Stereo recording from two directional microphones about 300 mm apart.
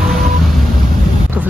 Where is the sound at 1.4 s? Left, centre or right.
Centre.